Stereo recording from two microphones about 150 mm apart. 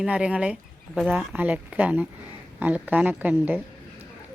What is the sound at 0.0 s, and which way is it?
A woman's voice, 5° right (ahead or behind).